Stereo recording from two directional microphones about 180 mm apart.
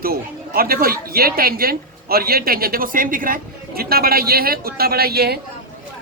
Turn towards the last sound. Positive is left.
turn(degrees=-60)  # may be behind; listen again after turning